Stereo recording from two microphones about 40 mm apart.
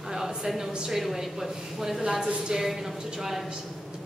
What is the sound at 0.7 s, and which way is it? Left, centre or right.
A woman's voice, centre.